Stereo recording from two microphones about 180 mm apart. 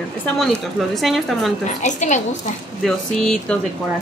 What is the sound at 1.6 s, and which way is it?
Speech, 40° left (ahead or behind).